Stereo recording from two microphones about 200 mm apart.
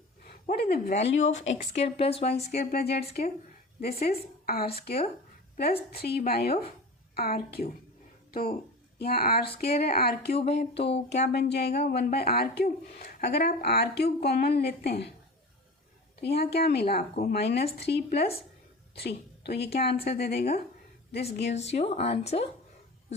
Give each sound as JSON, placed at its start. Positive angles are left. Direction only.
{"t": 0.4, "sound": "speech", "side_deg": 50}
{"t": 0.9, "sound": "speech", "side_deg": 35}
{"t": 2.6, "sound": "speech", "side_deg": 50}
{"t": 5.9, "sound": "speech", "side_deg": 50}
{"t": 10.3, "sound": "speech", "side_deg": 30}
{"t": 11.3, "sound": "speech", "side_deg": 55}
{"t": 16.2, "sound": "speech", "side_deg": 55}
{"t": 21.5, "sound": "speech", "side_deg": 30}